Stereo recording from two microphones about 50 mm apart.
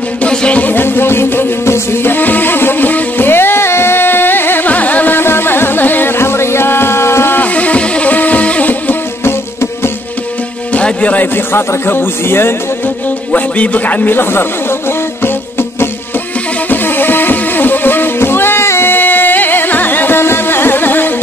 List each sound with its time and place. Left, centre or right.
0.3 s music: centre
0.6 s speech: left
1.7 s music: left
2.1 s music: left
4.6 s carnatic music: left
5.1 s music: left
7.3 s music: left
10.7 s music: left
11.3 s speech: left
13.3 s a man's voice: left
16.6 s music: left
18.9 s carnatic music: left